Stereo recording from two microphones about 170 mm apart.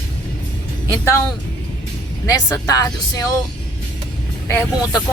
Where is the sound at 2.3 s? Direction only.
20° left (ahead or behind).